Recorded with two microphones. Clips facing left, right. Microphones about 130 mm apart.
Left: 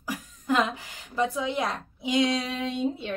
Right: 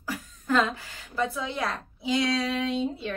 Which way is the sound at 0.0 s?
15° left (ahead or behind).